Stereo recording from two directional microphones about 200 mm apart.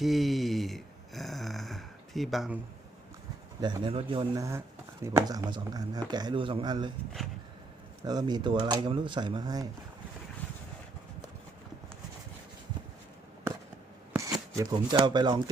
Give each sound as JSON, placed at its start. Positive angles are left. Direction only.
{"t": 0.0, "sound": "a sound", "side_deg": 0}
{"t": 3.6, "sound": "speech", "side_deg": -25}
{"t": 8.0, "sound": "speech", "side_deg": -20}
{"t": 14.1, "sound": "speech", "side_deg": -15}